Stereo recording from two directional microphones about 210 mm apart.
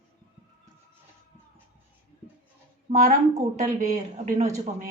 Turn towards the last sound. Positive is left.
turn(degrees=-35)  # may be behind; listen again after turning